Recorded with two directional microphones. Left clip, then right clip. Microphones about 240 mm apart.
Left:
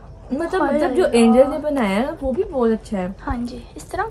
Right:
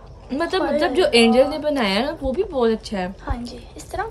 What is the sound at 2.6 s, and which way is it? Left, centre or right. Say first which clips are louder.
Speech: even; centre.